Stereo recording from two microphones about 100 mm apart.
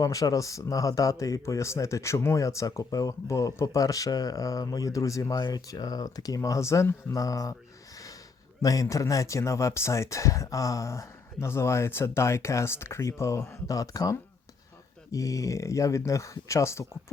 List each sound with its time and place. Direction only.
0.0 s speech: 35° left (ahead or behind)
8.6 s speech: 35° left (ahead or behind)